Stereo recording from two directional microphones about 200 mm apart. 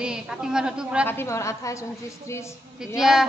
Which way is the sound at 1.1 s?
15° left (ahead or behind).